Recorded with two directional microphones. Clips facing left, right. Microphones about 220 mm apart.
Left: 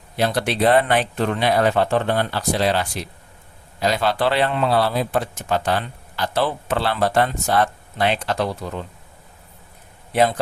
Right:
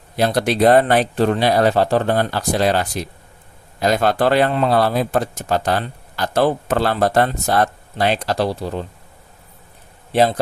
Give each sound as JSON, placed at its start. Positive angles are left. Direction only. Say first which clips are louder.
{"t": 0.2, "sound": "a man's voice", "louder": "right 4 dB", "side_deg": -40}
{"t": 10.1, "sound": "speech", "louder": "right 2 dB", "side_deg": -35}